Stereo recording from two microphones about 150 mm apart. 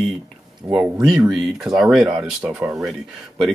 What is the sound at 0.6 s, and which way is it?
Speech, 20° right (ahead or behind).